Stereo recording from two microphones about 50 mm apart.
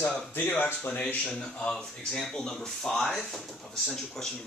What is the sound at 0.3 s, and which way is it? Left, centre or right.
Speech, left.